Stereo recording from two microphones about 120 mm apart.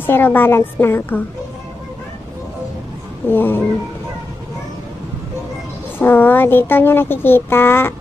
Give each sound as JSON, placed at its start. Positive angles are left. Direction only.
{"t": 0.0, "sound": "a woman's voice", "side_deg": 15}
{"t": 3.3, "sound": "a woman's voice", "side_deg": 20}
{"t": 5.9, "sound": "speech", "side_deg": 15}